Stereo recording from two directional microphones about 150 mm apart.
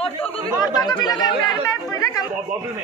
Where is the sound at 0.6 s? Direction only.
25° left (ahead or behind).